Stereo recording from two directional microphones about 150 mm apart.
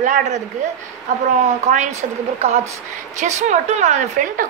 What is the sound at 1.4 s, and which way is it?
Speech, 50° right (ahead or behind).